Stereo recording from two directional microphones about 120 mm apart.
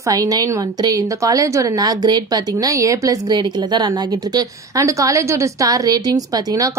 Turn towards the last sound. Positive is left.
turn(degrees=-30)  # may be behind; listen again after turning